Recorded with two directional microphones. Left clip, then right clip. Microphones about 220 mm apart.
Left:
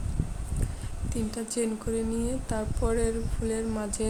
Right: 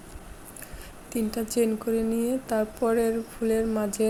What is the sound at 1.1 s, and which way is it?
Speech, 15° right (ahead or behind).